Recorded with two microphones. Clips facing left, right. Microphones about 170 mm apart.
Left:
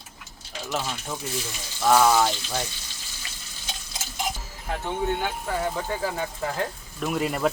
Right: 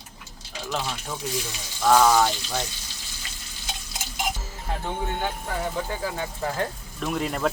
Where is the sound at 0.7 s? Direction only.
5° left (ahead or behind).